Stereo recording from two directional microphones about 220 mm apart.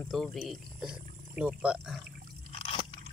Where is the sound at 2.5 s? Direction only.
25° left (ahead or behind).